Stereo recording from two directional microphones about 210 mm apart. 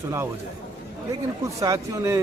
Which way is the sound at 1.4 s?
15° right (ahead or behind).